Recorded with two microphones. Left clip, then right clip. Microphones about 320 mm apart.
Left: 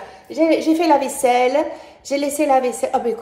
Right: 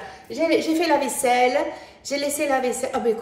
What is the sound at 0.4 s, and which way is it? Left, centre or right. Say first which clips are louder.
A woman's voice: left 4 dB; centre.